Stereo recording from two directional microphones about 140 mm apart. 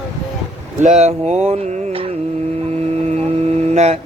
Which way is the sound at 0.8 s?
50° right (ahead or behind).